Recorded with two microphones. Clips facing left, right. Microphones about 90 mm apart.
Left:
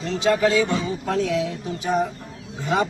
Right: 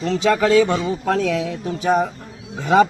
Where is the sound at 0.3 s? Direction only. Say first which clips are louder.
Right 3 dB; 60° right (ahead or behind).